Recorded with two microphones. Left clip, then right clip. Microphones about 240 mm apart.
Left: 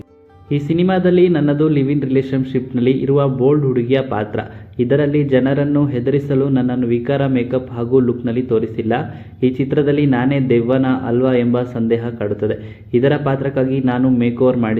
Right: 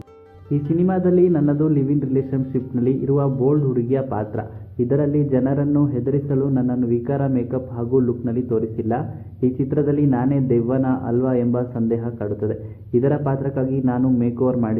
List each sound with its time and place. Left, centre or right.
0.5 s a man's voice: left